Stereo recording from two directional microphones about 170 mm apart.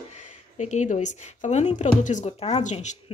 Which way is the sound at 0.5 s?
45° left (ahead or behind).